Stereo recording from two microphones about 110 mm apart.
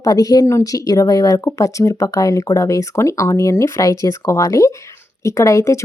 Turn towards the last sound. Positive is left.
turn(degrees=30)  # may be behind; listen again after turning